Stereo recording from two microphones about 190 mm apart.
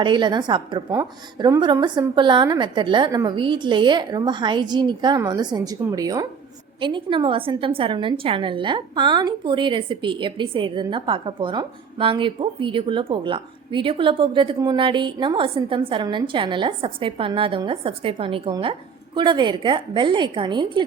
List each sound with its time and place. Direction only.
0.0 s a woman's voice: 25° right (ahead or behind)